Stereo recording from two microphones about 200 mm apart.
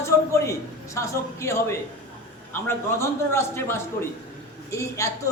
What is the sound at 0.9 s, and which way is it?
A man's voice, 15° left (ahead or behind).